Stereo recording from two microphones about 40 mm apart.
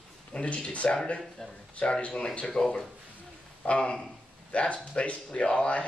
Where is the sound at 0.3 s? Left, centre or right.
Left.